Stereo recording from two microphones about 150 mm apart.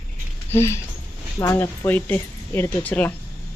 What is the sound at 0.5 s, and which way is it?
A woman's voice, 20° left (ahead or behind).